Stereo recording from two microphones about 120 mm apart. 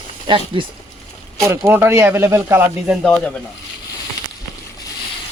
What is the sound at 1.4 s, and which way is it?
Speech, 20° right (ahead or behind).